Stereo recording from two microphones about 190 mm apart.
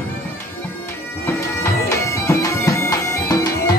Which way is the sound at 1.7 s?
15° left (ahead or behind).